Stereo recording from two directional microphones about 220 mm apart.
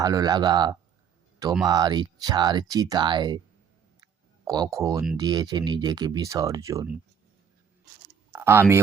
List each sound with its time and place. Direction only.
0.0 s speech: 15° right (ahead or behind)
4.0 s clicking: 15° right (ahead or behind)
5.1 s speech: 20° right (ahead or behind)
8.3 s a sound: 10° right (ahead or behind)